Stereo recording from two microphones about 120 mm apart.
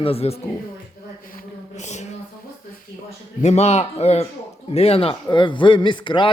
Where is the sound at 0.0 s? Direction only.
55° left (ahead or behind).